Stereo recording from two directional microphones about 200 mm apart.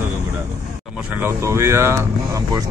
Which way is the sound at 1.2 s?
15° right (ahead or behind).